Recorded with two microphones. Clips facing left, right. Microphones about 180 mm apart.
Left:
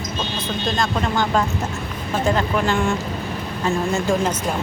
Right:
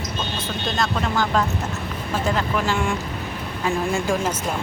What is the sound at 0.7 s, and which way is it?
Speech, 5° right (ahead or behind).